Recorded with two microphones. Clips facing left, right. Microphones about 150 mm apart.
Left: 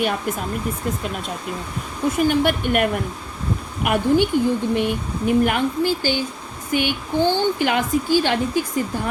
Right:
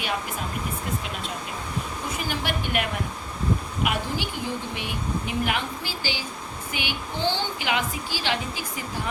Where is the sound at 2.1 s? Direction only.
50° left (ahead or behind).